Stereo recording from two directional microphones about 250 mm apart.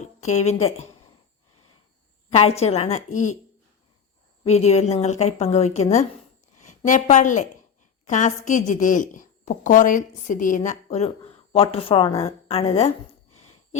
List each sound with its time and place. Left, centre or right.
0.2 s a woman's voice: left
2.3 s a woman's voice: left
4.4 s a woman's voice: left